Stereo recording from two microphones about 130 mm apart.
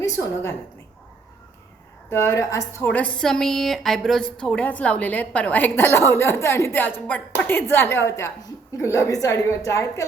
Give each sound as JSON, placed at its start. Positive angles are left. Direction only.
{"t": 0.0, "sound": "a woman's voice", "side_deg": 25}
{"t": 2.0, "sound": "a woman's voice", "side_deg": 25}
{"t": 2.9, "sound": "a woman's voice", "side_deg": 10}